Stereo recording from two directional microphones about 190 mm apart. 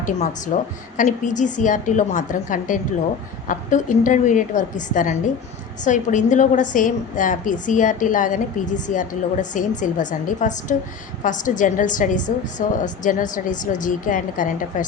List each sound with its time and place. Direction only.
0.0 s a woman's voice: 40° left (ahead or behind)